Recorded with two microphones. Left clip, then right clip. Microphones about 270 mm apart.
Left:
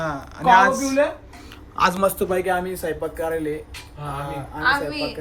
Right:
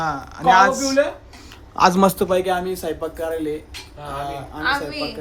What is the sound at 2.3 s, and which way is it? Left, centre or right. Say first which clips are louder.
Speech: right 2 dB; centre.